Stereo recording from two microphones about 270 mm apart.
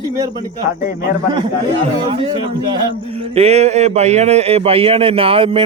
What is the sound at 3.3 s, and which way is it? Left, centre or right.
A man's voice, right.